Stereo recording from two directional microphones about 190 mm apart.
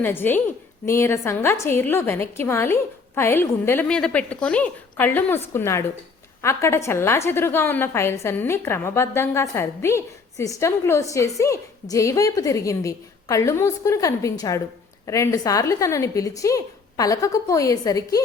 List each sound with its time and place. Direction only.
0.0 s a woman's voice: 10° left (ahead or behind)